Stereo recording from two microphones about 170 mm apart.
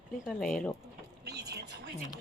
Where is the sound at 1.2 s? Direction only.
75° right (ahead or behind).